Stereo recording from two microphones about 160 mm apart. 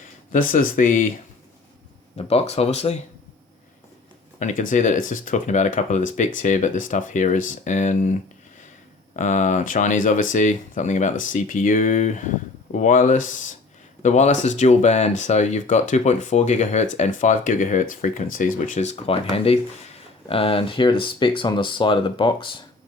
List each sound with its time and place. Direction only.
0.3 s speech: 60° left (ahead or behind)
2.1 s speech: 40° left (ahead or behind)
4.4 s speech: 50° left (ahead or behind)
9.1 s speech: 50° left (ahead or behind); by 22.4 s 30° left (ahead or behind)